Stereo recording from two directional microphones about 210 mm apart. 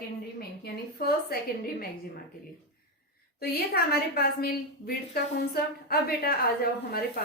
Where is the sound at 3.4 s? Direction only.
50° left (ahead or behind).